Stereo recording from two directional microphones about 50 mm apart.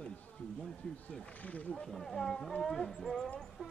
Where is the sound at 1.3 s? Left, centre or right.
Left.